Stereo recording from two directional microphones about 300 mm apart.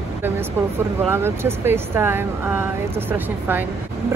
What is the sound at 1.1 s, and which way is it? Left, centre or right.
Speech, centre.